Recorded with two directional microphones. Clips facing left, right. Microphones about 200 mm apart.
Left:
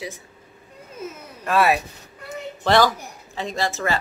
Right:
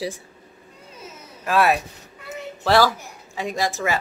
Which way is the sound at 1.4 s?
Centre (ahead or behind).